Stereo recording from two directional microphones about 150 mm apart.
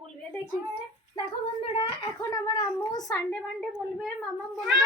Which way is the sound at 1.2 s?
35° left (ahead or behind).